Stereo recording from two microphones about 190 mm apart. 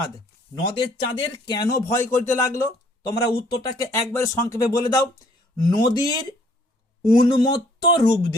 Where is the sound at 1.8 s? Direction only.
15° left (ahead or behind).